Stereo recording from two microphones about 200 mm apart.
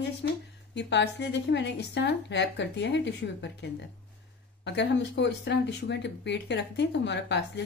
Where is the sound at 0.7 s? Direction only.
60° left (ahead or behind).